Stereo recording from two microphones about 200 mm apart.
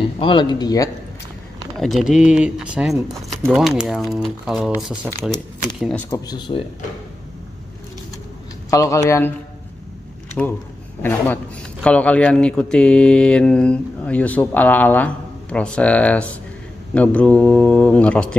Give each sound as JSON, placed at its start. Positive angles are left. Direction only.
{"t": 0.2, "sound": "speech", "side_deg": 25}
{"t": 1.8, "sound": "mantra", "side_deg": 0}
{"t": 6.0, "sound": "speech", "side_deg": 20}
{"t": 8.6, "sound": "speech", "side_deg": 15}
{"t": 10.4, "sound": "mantra", "side_deg": 5}
{"t": 11.0, "sound": "speech", "side_deg": 10}
{"t": 11.8, "sound": "mantra", "side_deg": 5}
{"t": 15.5, "sound": "speech", "side_deg": 5}